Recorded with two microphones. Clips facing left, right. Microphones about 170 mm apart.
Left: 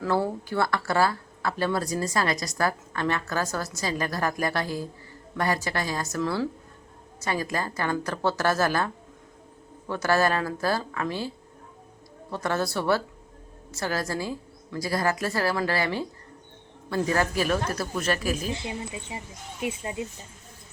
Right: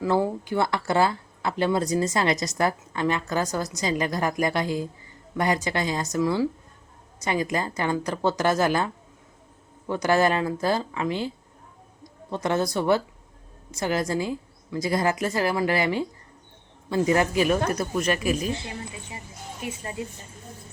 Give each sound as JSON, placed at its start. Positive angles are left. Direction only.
{"t": 0.0, "sound": "a woman's voice", "side_deg": -15}
{"t": 12.3, "sound": "a woman's voice", "side_deg": -20}
{"t": 18.7, "sound": "speech", "side_deg": 20}